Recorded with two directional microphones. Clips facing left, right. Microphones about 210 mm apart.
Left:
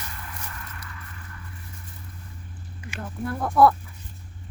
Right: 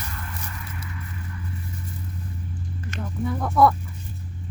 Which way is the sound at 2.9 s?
Centre (ahead or behind).